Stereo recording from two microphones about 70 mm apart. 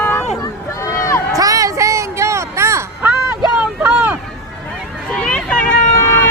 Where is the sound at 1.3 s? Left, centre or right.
Right.